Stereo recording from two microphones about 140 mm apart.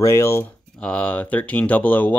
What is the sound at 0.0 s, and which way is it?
Speech, 20° left (ahead or behind).